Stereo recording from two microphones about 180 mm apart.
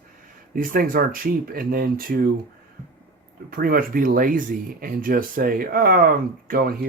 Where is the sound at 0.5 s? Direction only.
50° right (ahead or behind).